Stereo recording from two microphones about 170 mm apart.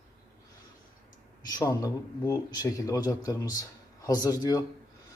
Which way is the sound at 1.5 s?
20° left (ahead or behind).